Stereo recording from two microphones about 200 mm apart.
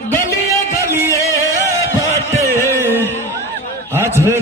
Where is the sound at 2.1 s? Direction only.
15° left (ahead or behind).